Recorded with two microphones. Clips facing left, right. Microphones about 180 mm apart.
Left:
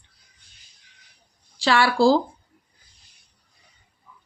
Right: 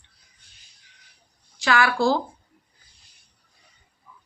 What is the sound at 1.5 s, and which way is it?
Speech, 30° left (ahead or behind).